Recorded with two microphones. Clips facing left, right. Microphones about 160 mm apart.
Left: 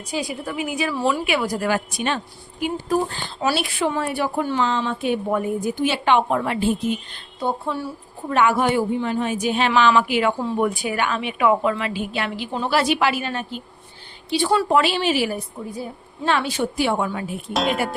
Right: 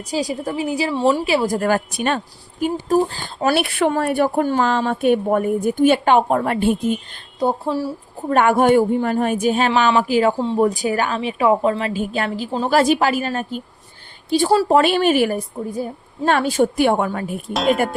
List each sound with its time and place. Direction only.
0.1 s a woman's voice: 40° right (ahead or behind)
1.5 s speech: 50° right (ahead or behind)
8.3 s a woman's voice: 50° right (ahead or behind)
14.8 s speech: 50° right (ahead or behind)
17.5 s speech: centre (ahead or behind)